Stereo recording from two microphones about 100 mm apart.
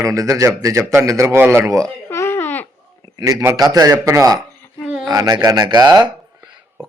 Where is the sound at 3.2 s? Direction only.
35° right (ahead or behind).